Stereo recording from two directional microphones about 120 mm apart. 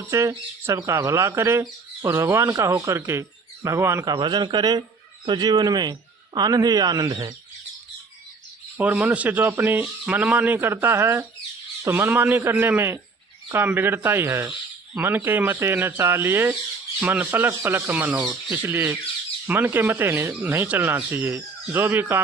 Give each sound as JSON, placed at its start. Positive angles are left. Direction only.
{"t": 0.1, "sound": "speech", "side_deg": -20}
{"t": 4.1, "sound": "a man's voice", "side_deg": -40}
{"t": 8.8, "sound": "speech", "side_deg": -15}